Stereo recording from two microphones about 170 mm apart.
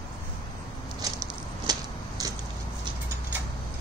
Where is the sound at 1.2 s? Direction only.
20° right (ahead or behind).